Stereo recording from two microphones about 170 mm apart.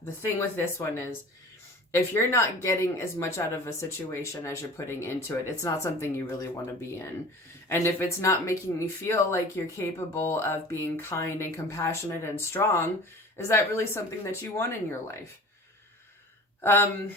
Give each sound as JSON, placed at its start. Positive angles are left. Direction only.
{"t": 0.0, "sound": "speech", "side_deg": 15}
{"t": 1.9, "sound": "speech", "side_deg": 15}
{"t": 7.7, "sound": "speech", "side_deg": 15}
{"t": 16.6, "sound": "speech", "side_deg": 15}